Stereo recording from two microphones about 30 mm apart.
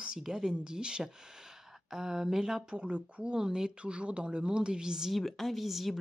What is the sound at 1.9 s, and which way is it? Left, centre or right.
Speech, centre.